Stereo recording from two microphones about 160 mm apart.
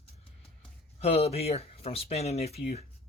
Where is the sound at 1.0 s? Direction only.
40° left (ahead or behind).